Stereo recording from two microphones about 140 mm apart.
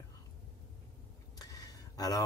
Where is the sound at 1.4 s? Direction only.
25° left (ahead or behind).